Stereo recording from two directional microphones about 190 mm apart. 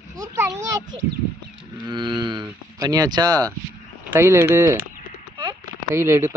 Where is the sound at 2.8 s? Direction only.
20° right (ahead or behind).